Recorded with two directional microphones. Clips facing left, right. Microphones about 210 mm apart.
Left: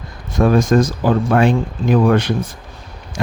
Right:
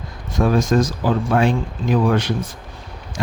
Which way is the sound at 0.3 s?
55° left (ahead or behind).